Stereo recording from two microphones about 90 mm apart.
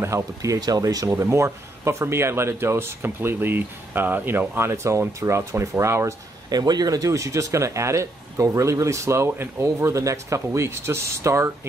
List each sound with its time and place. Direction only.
0.0 s speech: 35° right (ahead or behind)
6.5 s speech: 50° right (ahead or behind); by 11.5 s 30° right (ahead or behind)